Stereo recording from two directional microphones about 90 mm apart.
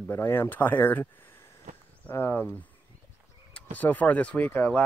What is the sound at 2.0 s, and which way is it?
Speech, 25° left (ahead or behind).